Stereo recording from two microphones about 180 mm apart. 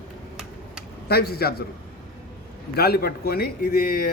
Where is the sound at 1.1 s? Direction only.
60° left (ahead or behind).